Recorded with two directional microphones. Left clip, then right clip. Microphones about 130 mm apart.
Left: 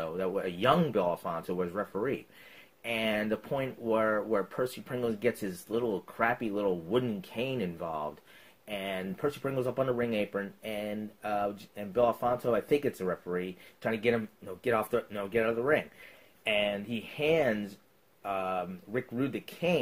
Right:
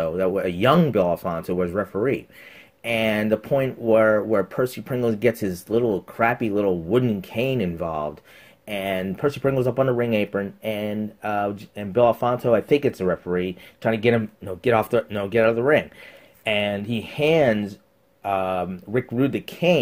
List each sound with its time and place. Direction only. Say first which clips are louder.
0.0 s speech: right 10 dB; 25° right (ahead or behind)